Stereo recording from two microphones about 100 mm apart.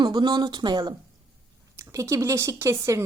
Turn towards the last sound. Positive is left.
turn(degrees=-30)  # may be behind; listen again after turning